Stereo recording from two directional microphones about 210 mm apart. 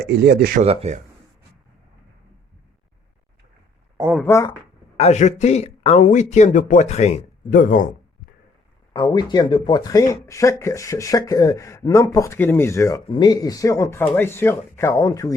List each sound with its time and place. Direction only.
0.1 s speech: 50° right (ahead or behind)
0.6 s speech: 30° right (ahead or behind)
4.3 s speech: 15° left (ahead or behind)
4.9 s speech: 30° left (ahead or behind)
9.1 s speech: 20° left (ahead or behind)